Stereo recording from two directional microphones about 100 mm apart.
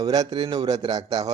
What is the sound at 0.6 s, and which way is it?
Speech, 40° right (ahead or behind).